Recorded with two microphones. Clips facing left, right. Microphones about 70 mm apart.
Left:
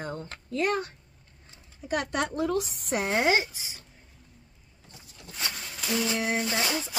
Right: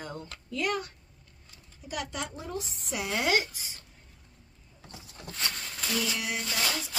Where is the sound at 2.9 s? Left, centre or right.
Left.